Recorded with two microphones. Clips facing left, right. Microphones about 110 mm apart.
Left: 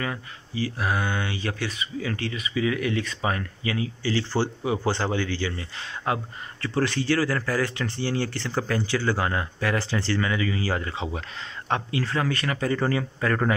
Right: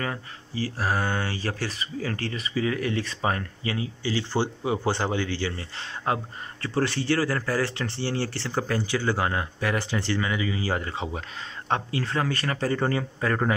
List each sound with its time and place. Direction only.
0.0 s speech: 35° right (ahead or behind)